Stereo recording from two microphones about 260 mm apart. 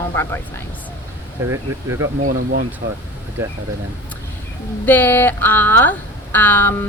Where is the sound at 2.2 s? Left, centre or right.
Right.